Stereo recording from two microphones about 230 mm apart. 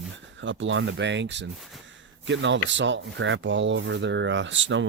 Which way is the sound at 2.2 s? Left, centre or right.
Right.